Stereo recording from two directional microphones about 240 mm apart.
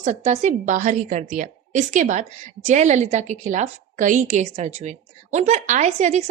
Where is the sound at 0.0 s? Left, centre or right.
Right.